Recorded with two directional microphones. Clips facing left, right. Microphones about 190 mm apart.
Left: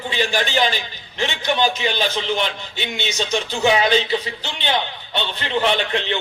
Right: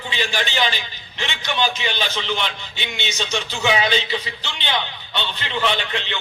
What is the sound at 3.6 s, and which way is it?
A man's voice, 45° left (ahead or behind).